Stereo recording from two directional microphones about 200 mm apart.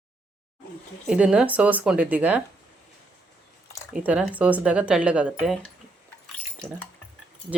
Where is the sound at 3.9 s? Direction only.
5° right (ahead or behind).